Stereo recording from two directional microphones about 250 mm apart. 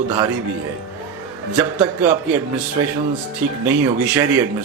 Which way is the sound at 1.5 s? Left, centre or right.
Centre.